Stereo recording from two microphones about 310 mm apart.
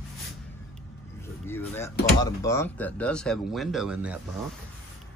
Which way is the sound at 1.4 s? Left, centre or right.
Centre.